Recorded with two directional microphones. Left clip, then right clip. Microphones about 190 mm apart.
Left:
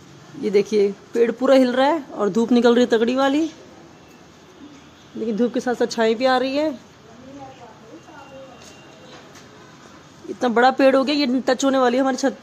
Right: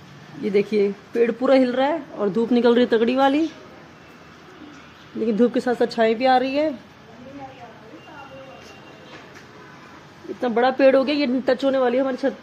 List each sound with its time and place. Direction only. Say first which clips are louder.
0.4 s speech: left 2 dB; 10° left (ahead or behind)
5.2 s a woman's voice: right 2 dB; 10° right (ahead or behind)
10.4 s speech: left 2 dB; 20° left (ahead or behind)
10.9 s speech: even; 10° left (ahead or behind)
11.6 s speech: left 3 dB; 20° left (ahead or behind)